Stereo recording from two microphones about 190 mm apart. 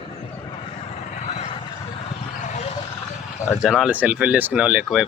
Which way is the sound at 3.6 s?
5° right (ahead or behind).